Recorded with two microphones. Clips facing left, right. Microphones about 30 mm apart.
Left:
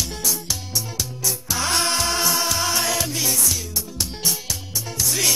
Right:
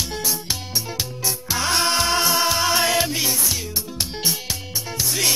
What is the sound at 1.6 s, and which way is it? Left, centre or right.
Music, centre.